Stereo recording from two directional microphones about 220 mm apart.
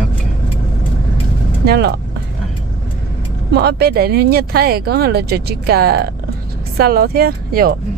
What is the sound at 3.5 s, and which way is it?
Speech, 50° right (ahead or behind).